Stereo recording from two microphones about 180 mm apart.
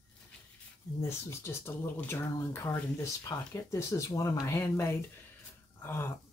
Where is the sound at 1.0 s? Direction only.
15° left (ahead or behind).